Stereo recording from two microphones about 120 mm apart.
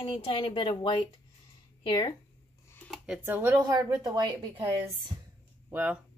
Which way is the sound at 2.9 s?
5° right (ahead or behind).